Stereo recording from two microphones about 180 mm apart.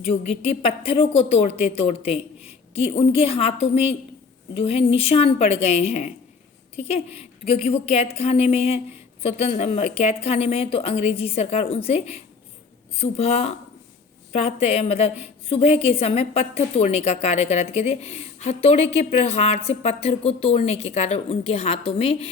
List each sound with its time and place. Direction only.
0.0 s a woman's voice: 35° left (ahead or behind)